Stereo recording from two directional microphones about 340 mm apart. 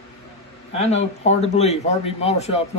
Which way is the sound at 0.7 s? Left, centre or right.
Centre.